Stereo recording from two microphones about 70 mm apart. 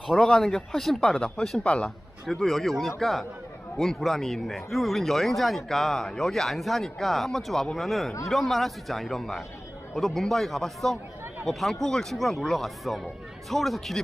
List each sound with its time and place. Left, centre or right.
0.2 s speech: centre
2.2 s speech: centre